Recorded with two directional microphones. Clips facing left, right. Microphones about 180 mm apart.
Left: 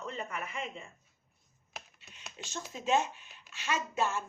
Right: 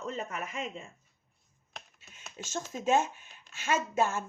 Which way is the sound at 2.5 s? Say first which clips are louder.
Right 3 dB; 45° right (ahead or behind).